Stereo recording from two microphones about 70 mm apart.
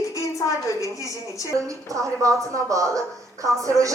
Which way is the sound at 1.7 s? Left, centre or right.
Right.